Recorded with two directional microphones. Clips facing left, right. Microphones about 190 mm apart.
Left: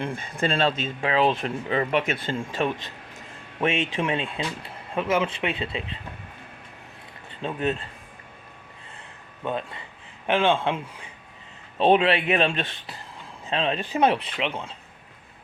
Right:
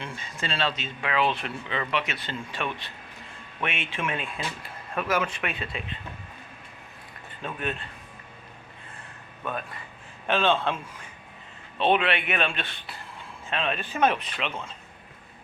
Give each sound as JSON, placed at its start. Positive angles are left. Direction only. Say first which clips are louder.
{"t": 0.0, "sound": "speech", "louder": "left 8 dB", "side_deg": 55}
{"t": 1.0, "sound": "speech", "louder": "left 4 dB", "side_deg": 35}
{"t": 3.6, "sound": "speech", "louder": "left 8 dB", "side_deg": 40}
{"t": 4.0, "sound": "speech", "louder": "left 4 dB", "side_deg": 25}
{"t": 7.4, "sound": "speech", "louder": "left 6 dB", "side_deg": 30}
{"t": 9.4, "sound": "a man's voice", "louder": "left 4 dB", "side_deg": 25}
{"t": 11.8, "sound": "speech", "louder": "left 4 dB", "side_deg": 35}